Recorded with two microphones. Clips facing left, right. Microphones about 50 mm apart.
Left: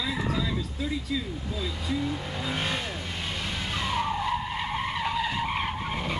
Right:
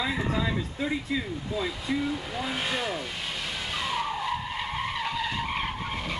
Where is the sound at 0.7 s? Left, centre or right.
Right.